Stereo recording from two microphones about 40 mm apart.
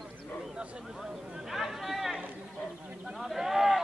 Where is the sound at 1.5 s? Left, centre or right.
Centre.